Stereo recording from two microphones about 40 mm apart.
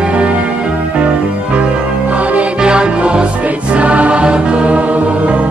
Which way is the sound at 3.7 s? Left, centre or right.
Right.